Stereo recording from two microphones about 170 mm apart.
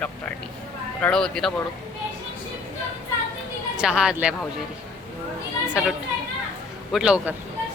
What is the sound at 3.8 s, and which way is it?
Speech, 5° right (ahead or behind).